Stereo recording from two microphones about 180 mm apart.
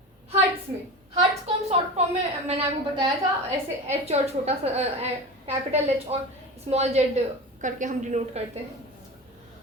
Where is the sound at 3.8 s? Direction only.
35° right (ahead or behind).